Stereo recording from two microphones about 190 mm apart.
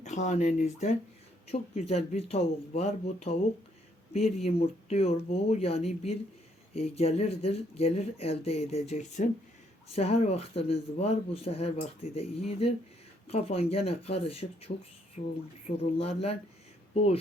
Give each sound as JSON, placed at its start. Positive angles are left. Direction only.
{"t": 0.0, "sound": "speech", "side_deg": 40}
{"t": 4.4, "sound": "speech", "side_deg": 30}